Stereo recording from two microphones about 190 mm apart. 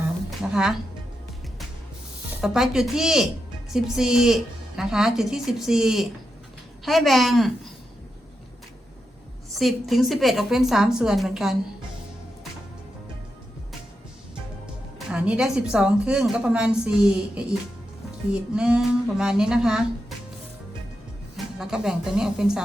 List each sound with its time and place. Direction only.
0.3 s a sound: centre (ahead or behind)
2.4 s a woman's voice: centre (ahead or behind)
9.5 s a woman's voice: centre (ahead or behind)
14.9 s a woman's voice: 5° right (ahead or behind)
18.5 s a woman's voice: 5° right (ahead or behind)
21.3 s speech: 5° right (ahead or behind)